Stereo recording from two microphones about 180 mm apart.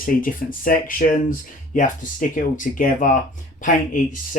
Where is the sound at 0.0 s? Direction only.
50° left (ahead or behind).